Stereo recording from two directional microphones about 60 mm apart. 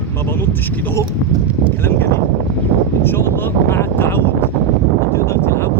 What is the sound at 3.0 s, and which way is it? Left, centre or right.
Speech, left.